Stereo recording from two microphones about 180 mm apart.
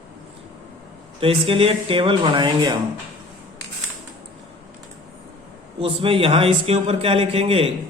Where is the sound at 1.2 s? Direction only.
30° right (ahead or behind).